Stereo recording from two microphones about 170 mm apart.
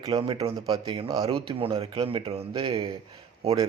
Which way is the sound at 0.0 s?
30° right (ahead or behind).